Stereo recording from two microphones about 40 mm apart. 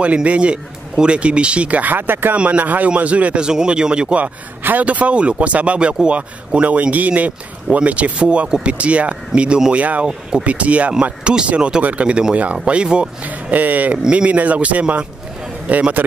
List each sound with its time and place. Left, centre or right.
0.0 s speech: right
2.3 s speech: right
3.3 s speech: right
4.8 s speech: right
9.7 s speech: right
13.2 s speech: right